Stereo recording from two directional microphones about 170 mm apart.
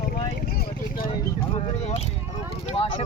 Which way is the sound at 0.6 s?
55° left (ahead or behind).